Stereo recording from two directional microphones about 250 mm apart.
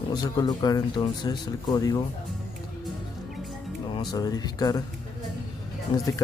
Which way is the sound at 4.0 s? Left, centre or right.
Centre.